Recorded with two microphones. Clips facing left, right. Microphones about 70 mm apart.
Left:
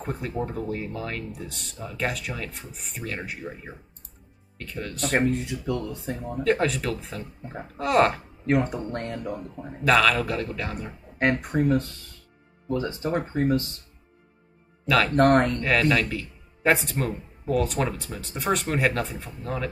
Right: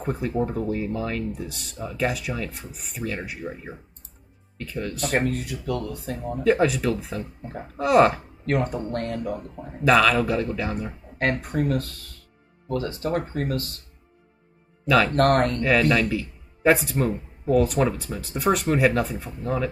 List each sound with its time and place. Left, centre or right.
0.0 s speech: centre
5.2 s speech: left
6.3 s speech: centre
8.5 s speech: centre
9.4 s speech: centre
11.4 s speech: left
14.9 s speech: centre
15.1 s speech: left
15.9 s speech: centre